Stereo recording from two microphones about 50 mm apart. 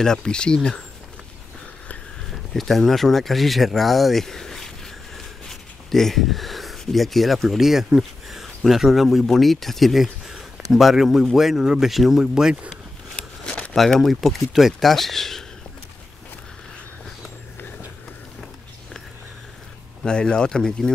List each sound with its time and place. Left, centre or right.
0.0 s speech: centre
2.3 s speech: centre
13.1 s a sound: left
14.0 s speech: centre
20.0 s speech: centre